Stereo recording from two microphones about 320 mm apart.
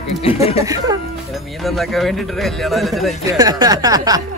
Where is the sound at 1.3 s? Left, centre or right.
Centre.